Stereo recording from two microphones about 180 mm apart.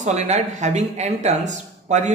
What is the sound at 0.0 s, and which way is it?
Speech, 40° right (ahead or behind).